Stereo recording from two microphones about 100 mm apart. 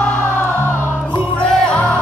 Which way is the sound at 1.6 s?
10° left (ahead or behind).